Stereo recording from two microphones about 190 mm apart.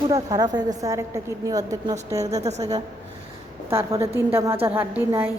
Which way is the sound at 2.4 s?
35° right (ahead or behind).